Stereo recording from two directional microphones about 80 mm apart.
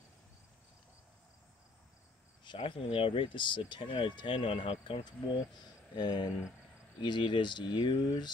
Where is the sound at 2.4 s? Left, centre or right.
Left.